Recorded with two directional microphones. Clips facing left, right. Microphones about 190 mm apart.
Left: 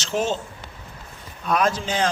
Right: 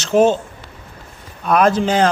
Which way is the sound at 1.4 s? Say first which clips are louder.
Right 7 dB; 60° right (ahead or behind).